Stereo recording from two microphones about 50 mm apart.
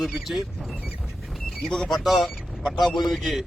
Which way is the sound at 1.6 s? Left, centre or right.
Centre.